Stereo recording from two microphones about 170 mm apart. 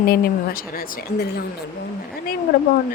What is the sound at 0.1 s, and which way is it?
Speech, 60° left (ahead or behind).